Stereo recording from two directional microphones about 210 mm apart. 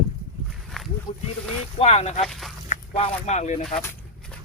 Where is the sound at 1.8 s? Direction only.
30° left (ahead or behind).